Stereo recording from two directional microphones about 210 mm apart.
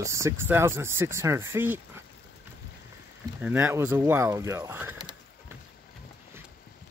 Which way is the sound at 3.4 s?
10° right (ahead or behind).